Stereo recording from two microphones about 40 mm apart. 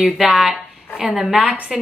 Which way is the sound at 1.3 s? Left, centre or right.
Right.